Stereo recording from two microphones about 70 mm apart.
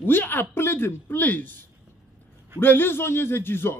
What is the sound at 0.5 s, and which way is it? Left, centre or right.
A man's voice, left.